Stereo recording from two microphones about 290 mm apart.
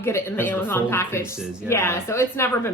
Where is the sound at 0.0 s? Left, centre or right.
Centre.